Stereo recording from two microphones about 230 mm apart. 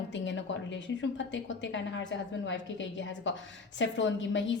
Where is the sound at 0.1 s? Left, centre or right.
Left.